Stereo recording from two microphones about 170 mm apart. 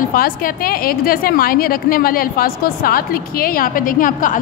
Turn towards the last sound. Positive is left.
turn(degrees=50)  # may be behind; listen again after turning